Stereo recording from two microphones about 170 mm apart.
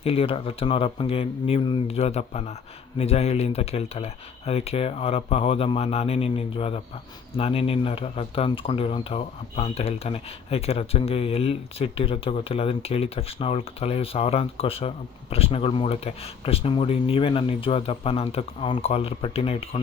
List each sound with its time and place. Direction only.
0.0 s speech: 35° left (ahead or behind)